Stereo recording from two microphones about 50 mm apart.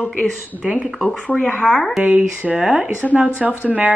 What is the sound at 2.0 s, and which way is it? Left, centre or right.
Speech, right.